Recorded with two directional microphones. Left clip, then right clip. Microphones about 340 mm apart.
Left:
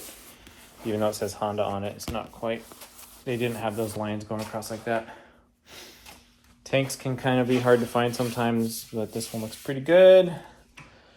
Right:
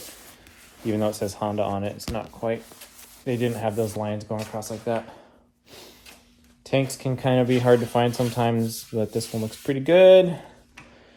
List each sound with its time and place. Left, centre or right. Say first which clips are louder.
0.9 s speech: right 1 dB; right
6.7 s speech: right 2 dB; right